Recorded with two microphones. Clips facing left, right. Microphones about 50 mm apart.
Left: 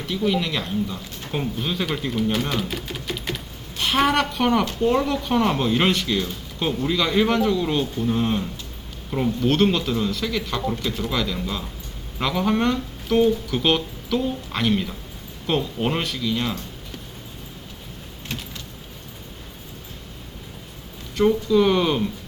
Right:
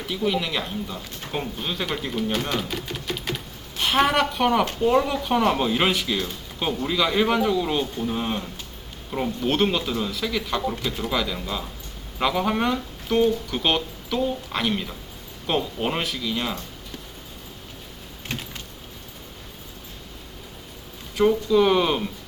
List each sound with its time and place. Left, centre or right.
0.0 s speech: centre
21.2 s speech: centre